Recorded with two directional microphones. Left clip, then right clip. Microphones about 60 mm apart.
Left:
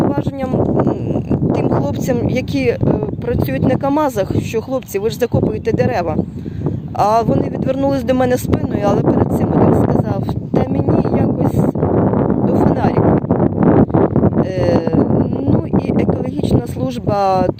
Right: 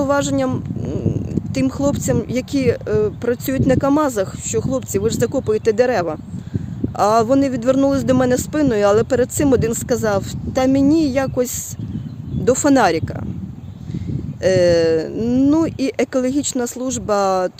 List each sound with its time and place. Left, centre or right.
0.1 s speech: right
1.8 s speech: right
12.5 s speech: right
14.4 s speech: right
15.3 s a sound: right
15.8 s speech: right